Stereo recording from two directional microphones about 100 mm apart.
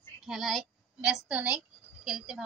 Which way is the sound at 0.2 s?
Centre (ahead or behind).